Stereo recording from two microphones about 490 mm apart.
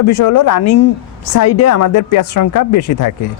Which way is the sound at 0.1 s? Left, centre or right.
Left.